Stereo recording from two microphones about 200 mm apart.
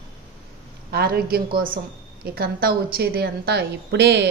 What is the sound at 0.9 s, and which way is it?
A woman's voice, 50° right (ahead or behind).